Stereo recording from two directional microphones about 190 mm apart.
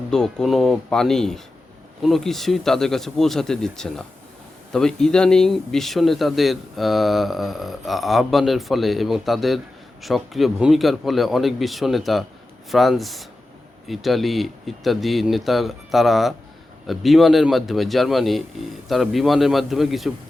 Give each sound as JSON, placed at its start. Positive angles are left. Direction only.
{"t": 0.1, "sound": "speech", "side_deg": 5}